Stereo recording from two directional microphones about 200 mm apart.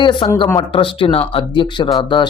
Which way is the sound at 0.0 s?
25° left (ahead or behind).